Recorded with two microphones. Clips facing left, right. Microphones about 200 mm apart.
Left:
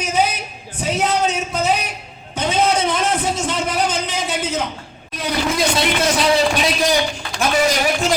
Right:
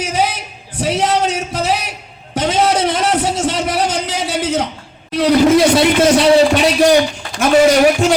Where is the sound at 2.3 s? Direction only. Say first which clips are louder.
Right 3 dB; 90° right; by 5.8 s 75° right (ahead or behind).